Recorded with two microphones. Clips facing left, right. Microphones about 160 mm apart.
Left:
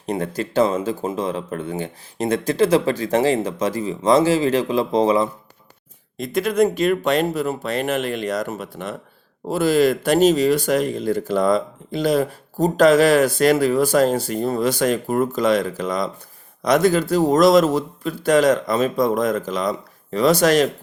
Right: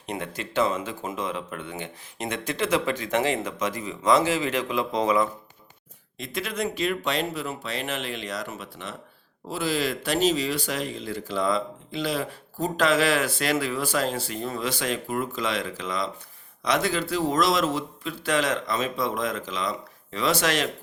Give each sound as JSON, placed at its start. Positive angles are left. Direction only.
{"t": 0.0, "sound": "speech", "side_deg": 40}
{"t": 6.1, "sound": "speech", "side_deg": 45}